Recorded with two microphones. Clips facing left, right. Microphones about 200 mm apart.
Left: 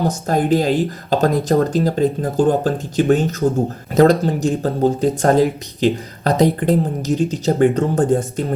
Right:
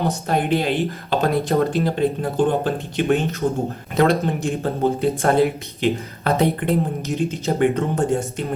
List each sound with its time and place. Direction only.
0.1 s speech: 45° left (ahead or behind)